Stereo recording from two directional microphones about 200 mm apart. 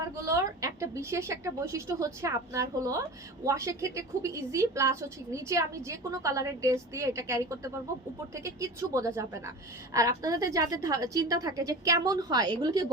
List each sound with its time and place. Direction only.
0.3 s a woman's voice: 15° right (ahead or behind)